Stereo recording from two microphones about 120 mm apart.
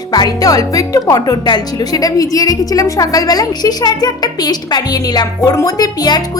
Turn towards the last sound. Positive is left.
turn(degrees=35)  # may be behind; listen again after turning